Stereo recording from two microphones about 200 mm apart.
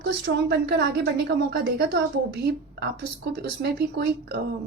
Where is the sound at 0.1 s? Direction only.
55° right (ahead or behind).